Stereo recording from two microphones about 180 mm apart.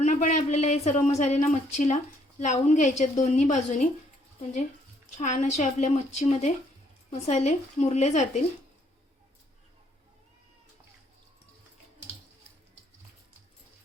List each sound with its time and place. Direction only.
0.0 s a woman's voice: 45° left (ahead or behind)
5.1 s a woman's voice: 40° left (ahead or behind)